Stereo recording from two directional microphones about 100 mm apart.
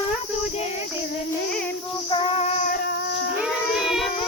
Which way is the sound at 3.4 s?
5° right (ahead or behind).